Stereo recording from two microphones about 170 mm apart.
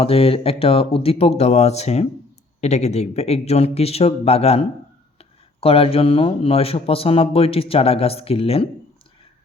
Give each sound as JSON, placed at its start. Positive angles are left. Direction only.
{"t": 0.0, "sound": "speech", "side_deg": 35}